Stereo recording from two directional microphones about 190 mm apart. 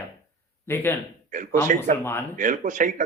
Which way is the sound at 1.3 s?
40° right (ahead or behind).